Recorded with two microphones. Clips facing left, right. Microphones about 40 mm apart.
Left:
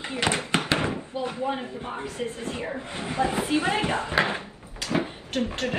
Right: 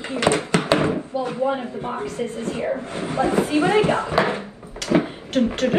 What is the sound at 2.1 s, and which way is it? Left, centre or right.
Speech, right.